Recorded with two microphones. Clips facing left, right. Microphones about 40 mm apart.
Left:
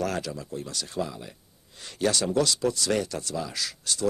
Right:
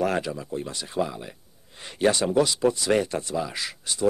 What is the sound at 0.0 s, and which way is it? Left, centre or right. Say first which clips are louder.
Speech: right 4 dB; right.